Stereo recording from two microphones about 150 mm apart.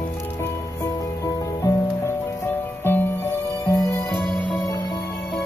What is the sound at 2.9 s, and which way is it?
Music, 15° left (ahead or behind).